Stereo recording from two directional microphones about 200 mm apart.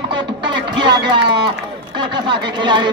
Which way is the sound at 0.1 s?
25° right (ahead or behind).